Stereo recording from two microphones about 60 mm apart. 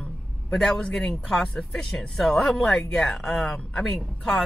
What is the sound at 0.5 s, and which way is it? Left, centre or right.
Speech, centre.